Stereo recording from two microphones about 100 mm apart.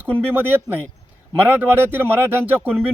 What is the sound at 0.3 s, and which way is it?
Speech, 20° right (ahead or behind).